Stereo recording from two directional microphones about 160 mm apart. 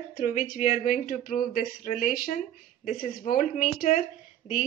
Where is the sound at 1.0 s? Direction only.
65° left (ahead or behind).